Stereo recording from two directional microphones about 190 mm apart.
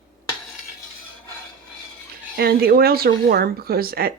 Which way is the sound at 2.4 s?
55° right (ahead or behind).